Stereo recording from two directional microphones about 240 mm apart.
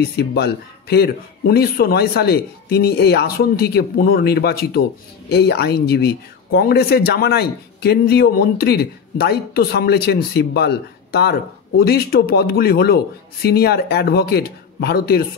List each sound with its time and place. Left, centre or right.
0.0 s speech: left